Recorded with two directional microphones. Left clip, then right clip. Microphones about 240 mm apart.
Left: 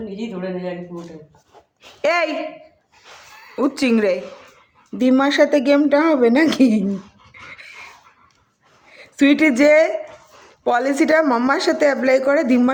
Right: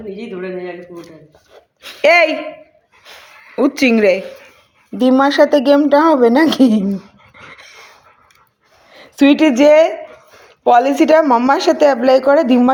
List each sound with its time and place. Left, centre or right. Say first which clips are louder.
1.8 s speech: right 8 dB; centre
3.1 s a sound: right 3 dB; centre
4.9 s a woman's voice: right 4 dB; centre
8.9 s a woman's voice: right 4 dB; centre